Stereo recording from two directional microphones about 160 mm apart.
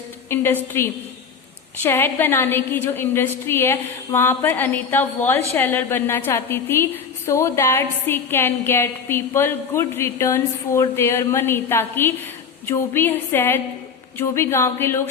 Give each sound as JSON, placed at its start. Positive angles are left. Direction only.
{"t": 0.3, "sound": "a woman's voice", "side_deg": 15}